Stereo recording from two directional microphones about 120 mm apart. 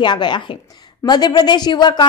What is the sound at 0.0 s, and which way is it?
A woman's voice, 40° left (ahead or behind).